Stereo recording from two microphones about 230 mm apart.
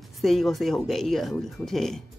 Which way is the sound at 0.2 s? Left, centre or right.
Centre.